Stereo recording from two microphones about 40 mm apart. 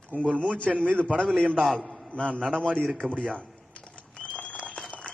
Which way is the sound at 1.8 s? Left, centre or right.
Centre.